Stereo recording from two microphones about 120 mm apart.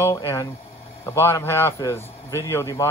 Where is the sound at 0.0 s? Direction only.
25° left (ahead or behind).